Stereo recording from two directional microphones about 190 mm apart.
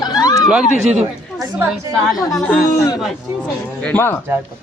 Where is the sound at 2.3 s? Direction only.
Centre (ahead or behind).